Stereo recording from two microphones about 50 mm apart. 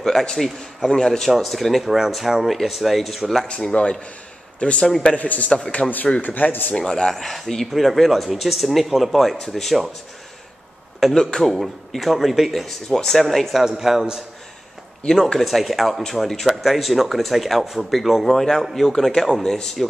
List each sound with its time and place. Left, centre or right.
0.0 s a man's voice: centre
3.4 s a man's voice: left
6.8 s a man's voice: centre
11.0 s a man's voice: centre
13.6 s speech: centre
15.0 s speech: centre
15.3 s a man's voice: centre